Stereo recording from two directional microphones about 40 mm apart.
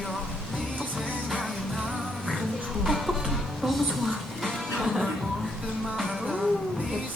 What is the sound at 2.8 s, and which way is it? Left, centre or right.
Music, centre.